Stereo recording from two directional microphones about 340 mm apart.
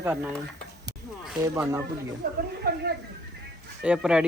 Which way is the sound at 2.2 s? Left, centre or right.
Right.